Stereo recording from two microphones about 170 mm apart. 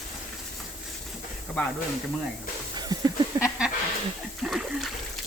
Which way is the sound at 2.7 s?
25° right (ahead or behind).